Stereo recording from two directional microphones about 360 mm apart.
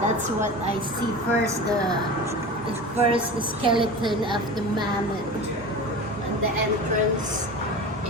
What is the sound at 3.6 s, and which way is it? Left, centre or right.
Speech, centre.